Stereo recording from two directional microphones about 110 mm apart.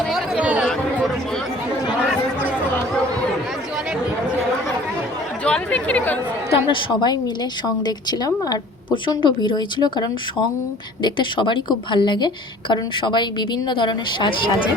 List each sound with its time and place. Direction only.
0.1 s chatter: 5° right (ahead or behind)
0.4 s chatter: 15° right (ahead or behind)
5.5 s speech: 10° left (ahead or behind)
6.7 s a woman's voice: 45° left (ahead or behind)